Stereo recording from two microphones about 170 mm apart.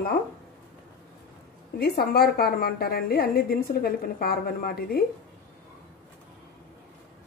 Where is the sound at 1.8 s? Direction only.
65° left (ahead or behind).